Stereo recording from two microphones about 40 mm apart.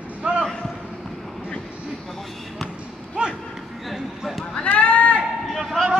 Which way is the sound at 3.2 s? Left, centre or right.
Right.